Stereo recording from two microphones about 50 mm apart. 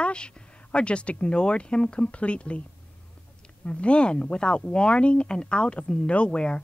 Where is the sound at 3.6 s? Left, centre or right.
Left.